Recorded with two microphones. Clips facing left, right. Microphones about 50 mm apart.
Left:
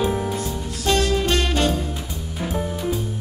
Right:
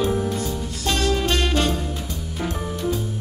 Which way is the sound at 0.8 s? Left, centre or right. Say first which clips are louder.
Left 2 dB; centre.